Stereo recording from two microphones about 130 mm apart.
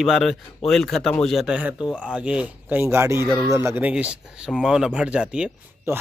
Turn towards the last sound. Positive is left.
turn(degrees=-20)  # may be behind; listen again after turning